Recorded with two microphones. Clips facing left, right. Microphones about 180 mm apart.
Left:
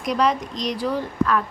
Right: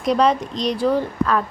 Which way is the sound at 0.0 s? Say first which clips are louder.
Right 4 dB; 30° right (ahead or behind).